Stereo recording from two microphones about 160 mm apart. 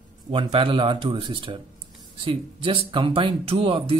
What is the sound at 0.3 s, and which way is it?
Speech, 35° right (ahead or behind).